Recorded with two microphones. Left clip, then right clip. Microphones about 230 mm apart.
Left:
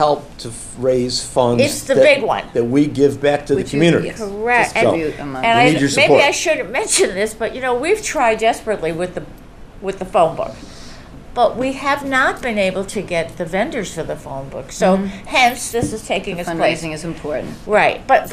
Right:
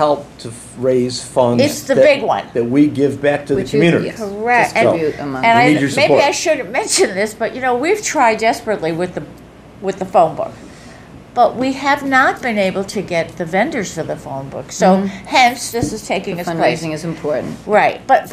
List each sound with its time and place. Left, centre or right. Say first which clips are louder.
0.8 s speech: right 1 dB; left
2.0 s a woman's voice: right 1 dB; centre
2.5 s speech: right 2 dB; left
4.4 s a woman's voice: right 2 dB; centre
4.9 s speech: right 3 dB; right
5.4 s a woman's voice: right 2 dB; centre
16.8 s speech: right 4 dB; right
17.6 s a woman's voice: right 1 dB; centre